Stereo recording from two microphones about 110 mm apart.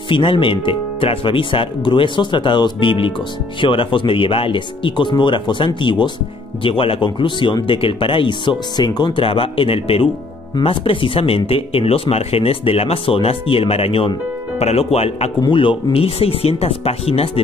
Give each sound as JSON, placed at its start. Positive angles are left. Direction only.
{"t": 0.1, "sound": "speech", "side_deg": 50}
{"t": 14.6, "sound": "speech", "side_deg": 70}
{"t": 15.4, "sound": "speech", "side_deg": 50}
{"t": 15.9, "sound": "speech", "side_deg": 65}